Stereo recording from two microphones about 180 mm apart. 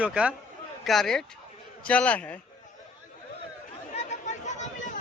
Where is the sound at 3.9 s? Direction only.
40° left (ahead or behind).